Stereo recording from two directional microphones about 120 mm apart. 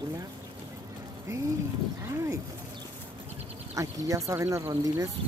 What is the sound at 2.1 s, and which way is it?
Speech, 25° right (ahead or behind).